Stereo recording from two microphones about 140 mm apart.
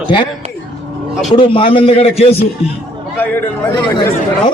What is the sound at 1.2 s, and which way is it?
A man's voice, 40° left (ahead or behind).